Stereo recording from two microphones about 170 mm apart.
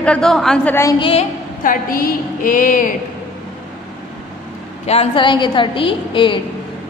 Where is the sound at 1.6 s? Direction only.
55° left (ahead or behind).